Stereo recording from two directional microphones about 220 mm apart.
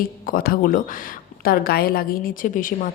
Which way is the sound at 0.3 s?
40° left (ahead or behind).